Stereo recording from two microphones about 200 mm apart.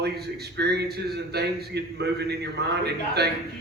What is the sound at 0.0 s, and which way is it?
A man's voice, 55° right (ahead or behind).